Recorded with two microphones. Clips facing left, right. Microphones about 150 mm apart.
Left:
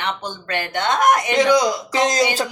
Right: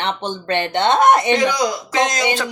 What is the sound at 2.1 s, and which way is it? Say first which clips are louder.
Speech: left 1 dB; 35° left (ahead or behind).